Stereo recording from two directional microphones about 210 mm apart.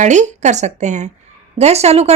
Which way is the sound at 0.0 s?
35° right (ahead or behind).